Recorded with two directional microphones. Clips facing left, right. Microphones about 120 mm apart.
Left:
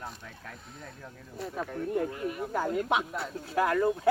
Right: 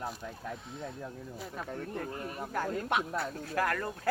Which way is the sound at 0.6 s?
Centre (ahead or behind).